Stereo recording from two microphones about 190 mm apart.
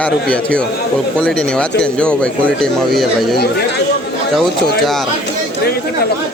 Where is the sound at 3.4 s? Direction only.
60° left (ahead or behind).